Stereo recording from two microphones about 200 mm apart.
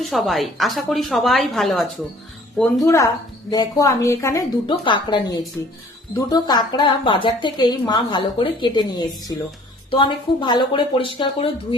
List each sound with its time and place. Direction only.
0.0 s a woman's voice: centre (ahead or behind)
2.8 s a woman's voice: 15° left (ahead or behind)